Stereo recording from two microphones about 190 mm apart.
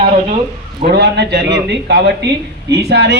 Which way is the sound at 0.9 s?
65° right (ahead or behind).